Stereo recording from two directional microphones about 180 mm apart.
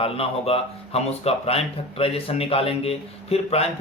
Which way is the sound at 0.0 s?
30° left (ahead or behind).